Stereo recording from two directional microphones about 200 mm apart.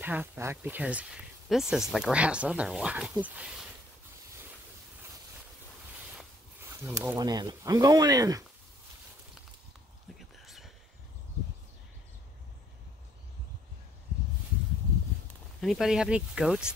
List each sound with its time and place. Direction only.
0.0 s speech: 10° right (ahead or behind)
6.7 s speech: 15° right (ahead or behind)
10.1 s whispering: centre (ahead or behind)
15.6 s speech: centre (ahead or behind)